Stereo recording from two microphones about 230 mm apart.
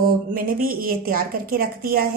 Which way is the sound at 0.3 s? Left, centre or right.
Right.